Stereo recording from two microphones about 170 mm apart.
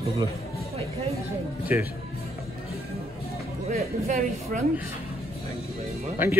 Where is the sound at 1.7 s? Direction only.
10° right (ahead or behind).